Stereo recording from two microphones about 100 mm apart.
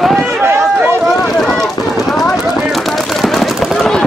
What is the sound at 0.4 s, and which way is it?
Run, 25° right (ahead or behind).